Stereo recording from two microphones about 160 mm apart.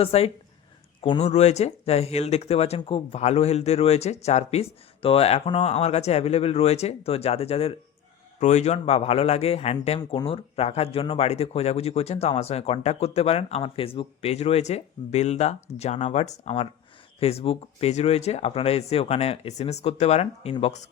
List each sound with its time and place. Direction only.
0.0 s speech: 40° left (ahead or behind)